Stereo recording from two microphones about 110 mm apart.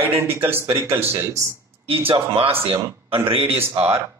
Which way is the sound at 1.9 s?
60° right (ahead or behind).